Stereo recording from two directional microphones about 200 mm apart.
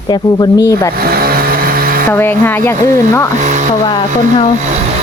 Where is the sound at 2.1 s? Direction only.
10° left (ahead or behind).